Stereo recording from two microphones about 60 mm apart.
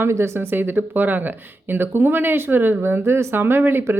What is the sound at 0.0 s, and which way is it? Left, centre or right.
Speech, right.